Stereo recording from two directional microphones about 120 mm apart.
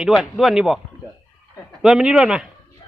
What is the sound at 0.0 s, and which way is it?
Speech, centre (ahead or behind).